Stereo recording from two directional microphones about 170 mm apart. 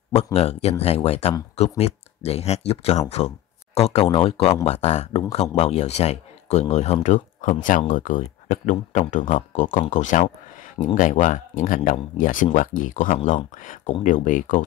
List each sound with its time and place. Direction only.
0.1 s speech: 40° left (ahead or behind)